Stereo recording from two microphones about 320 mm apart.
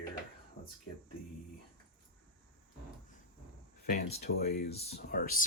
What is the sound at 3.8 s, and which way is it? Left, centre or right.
Speech, left.